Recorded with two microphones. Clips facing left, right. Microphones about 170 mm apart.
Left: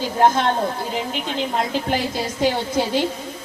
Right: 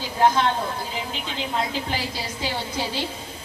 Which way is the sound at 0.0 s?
50° left (ahead or behind).